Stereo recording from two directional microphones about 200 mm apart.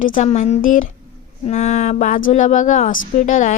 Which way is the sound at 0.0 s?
40° left (ahead or behind).